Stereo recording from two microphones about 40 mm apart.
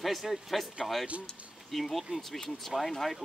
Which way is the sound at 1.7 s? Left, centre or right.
Centre.